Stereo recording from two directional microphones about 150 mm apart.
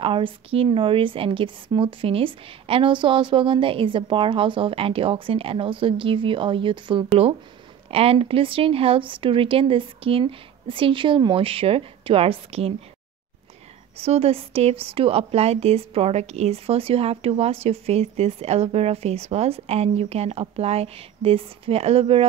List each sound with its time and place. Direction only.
0.0 s a woman's voice: 35° right (ahead or behind)
13.9 s a woman's voice: 40° right (ahead or behind)